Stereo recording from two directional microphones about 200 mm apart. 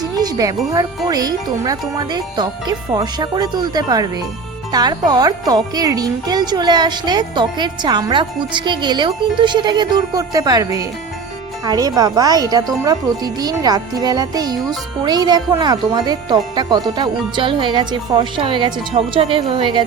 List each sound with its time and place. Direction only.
0.2 s speech: 20° right (ahead or behind)